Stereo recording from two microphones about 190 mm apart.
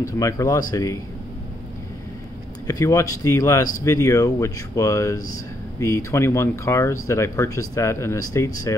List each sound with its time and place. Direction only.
0.0 s speech: 15° left (ahead or behind)
2.6 s speech: 20° left (ahead or behind)